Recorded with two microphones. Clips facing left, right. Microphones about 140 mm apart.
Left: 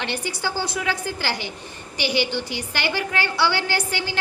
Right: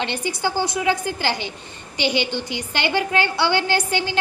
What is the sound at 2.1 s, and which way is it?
Speech, 20° right (ahead or behind).